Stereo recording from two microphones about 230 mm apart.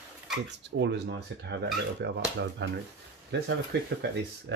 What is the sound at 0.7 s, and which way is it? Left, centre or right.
Speech, right.